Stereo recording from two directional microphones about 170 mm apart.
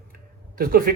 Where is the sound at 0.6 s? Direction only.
60° right (ahead or behind).